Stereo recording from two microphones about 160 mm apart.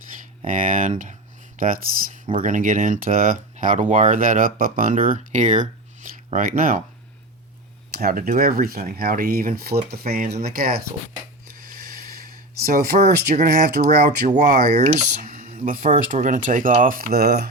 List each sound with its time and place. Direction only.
0.4 s speech: 55° right (ahead or behind)
7.9 s speech: 70° right (ahead or behind)
11.8 s snort: 65° right (ahead or behind)
12.6 s speech: 70° right (ahead or behind)
13.3 s speech: 50° right (ahead or behind); by 17.5 s 75° right (ahead or behind)